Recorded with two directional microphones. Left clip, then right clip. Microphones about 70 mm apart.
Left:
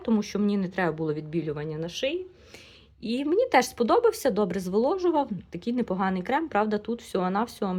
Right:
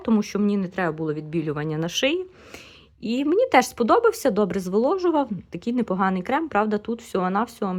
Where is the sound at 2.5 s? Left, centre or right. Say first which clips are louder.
Right 7 dB; right.